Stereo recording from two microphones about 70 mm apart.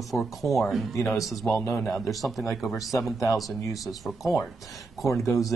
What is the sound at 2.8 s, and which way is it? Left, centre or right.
Speech, left.